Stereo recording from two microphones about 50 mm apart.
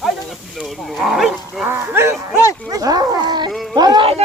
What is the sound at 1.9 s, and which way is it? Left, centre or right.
Speech, right.